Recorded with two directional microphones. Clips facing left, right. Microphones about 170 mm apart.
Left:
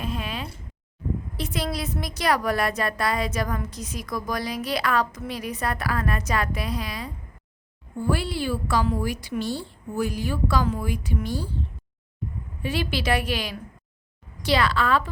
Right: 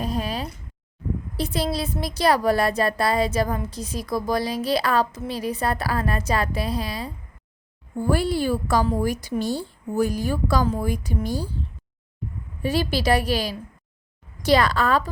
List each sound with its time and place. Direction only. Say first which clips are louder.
0.0 s a sound: right 4 dB; 40° right (ahead or behind)
1.4 s a woman's voice: right 5 dB; 30° right (ahead or behind)
7.9 s a woman's voice: right 4 dB; 45° right (ahead or behind)
12.6 s a woman's voice: right 4 dB; 40° right (ahead or behind)